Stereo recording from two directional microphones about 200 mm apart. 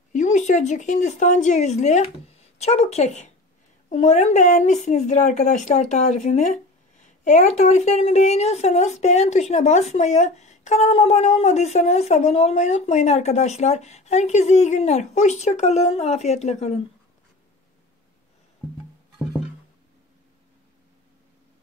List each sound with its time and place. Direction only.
0.1 s a woman's voice: 35° left (ahead or behind)